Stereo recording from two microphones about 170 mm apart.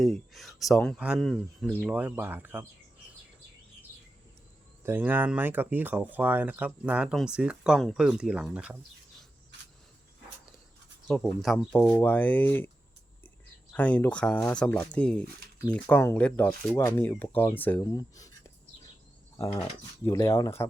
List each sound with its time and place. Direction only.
0.0 s speech: centre (ahead or behind)
1.9 s speech: 10° right (ahead or behind)
4.8 s speech: 10° right (ahead or behind)
11.1 s speech: centre (ahead or behind)
13.7 s speech: 10° left (ahead or behind)
20.1 s speech: 20° left (ahead or behind)